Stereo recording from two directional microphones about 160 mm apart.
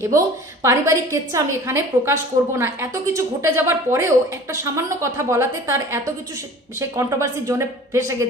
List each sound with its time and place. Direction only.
0.0 s a woman's voice: 15° right (ahead or behind)